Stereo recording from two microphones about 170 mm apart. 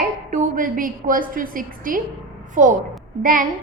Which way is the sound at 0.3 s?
50° right (ahead or behind).